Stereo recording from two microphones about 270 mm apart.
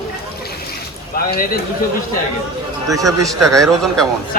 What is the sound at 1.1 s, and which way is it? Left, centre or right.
Speech, left.